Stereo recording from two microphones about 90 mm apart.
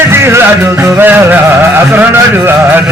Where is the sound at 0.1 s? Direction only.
30° right (ahead or behind).